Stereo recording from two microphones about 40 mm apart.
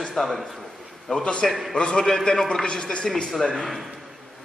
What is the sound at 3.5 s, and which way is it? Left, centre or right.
Speech, centre.